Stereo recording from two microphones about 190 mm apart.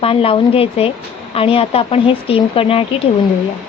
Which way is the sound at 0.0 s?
30° left (ahead or behind).